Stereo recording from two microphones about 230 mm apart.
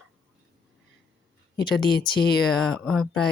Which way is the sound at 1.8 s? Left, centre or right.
Centre.